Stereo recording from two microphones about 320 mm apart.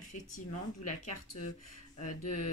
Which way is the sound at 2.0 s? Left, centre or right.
Left.